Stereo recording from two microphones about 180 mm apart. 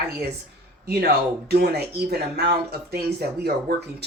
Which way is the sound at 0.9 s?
60° right (ahead or behind).